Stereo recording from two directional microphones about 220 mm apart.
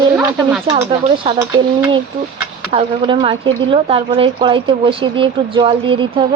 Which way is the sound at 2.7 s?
25° right (ahead or behind).